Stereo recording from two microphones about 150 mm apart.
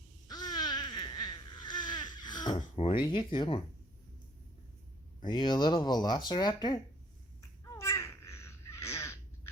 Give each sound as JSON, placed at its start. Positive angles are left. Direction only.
{"t": 0.3, "sound": "babbling", "side_deg": 30}
{"t": 3.1, "sound": "speech", "side_deg": 35}
{"t": 5.2, "sound": "speech", "side_deg": 30}
{"t": 7.6, "sound": "a sound", "side_deg": 20}